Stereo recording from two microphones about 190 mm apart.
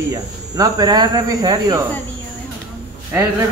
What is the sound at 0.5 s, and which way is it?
Speech, 20° right (ahead or behind).